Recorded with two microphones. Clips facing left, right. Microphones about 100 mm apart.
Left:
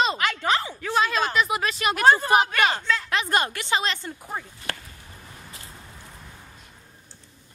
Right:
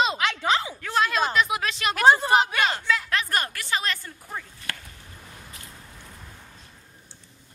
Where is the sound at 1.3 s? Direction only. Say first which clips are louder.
Left 1 dB; centre (ahead or behind).